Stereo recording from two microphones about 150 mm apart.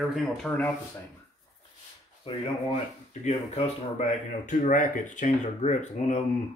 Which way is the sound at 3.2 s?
45° left (ahead or behind).